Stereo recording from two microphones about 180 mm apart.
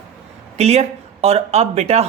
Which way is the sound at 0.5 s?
35° right (ahead or behind).